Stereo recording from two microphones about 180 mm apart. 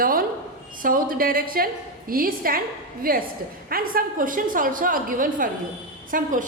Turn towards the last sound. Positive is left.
turn(degrees=-50)  # may be behind; listen again after turning